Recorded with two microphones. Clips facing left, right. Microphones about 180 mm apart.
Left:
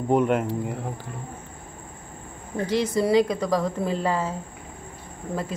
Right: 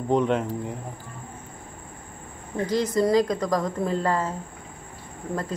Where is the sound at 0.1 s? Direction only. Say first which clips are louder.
Left 1 dB; 5° left (ahead or behind).